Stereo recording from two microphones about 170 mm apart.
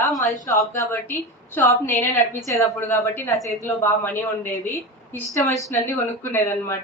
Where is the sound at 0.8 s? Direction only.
15° left (ahead or behind).